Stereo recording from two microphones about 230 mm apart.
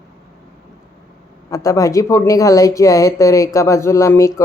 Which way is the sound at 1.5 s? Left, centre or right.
Centre.